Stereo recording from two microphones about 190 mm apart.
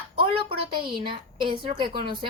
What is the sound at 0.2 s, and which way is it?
A woman's voice, 30° right (ahead or behind).